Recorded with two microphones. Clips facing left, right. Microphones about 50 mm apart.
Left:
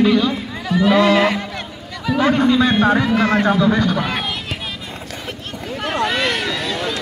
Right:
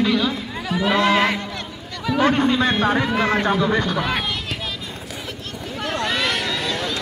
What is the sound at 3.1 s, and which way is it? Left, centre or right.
Speech, right.